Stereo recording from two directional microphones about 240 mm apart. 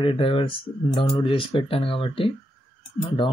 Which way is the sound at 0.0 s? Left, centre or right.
Left.